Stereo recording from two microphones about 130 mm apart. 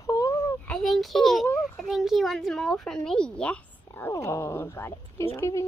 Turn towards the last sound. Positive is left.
turn(degrees=20)  # may be behind; listen again after turning